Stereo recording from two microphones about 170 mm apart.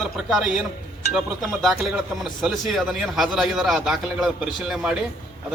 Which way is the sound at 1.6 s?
Centre (ahead or behind).